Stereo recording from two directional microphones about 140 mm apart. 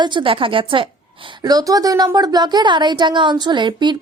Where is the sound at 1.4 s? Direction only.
25° right (ahead or behind).